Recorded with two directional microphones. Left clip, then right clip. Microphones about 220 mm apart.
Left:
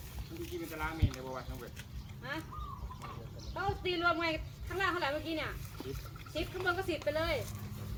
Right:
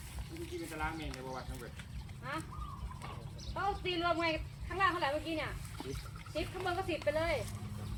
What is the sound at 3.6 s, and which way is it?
A woman's voice, 45° left (ahead or behind).